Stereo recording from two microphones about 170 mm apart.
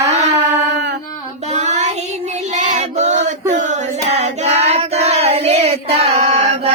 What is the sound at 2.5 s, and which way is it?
Female singing, 45° right (ahead or behind).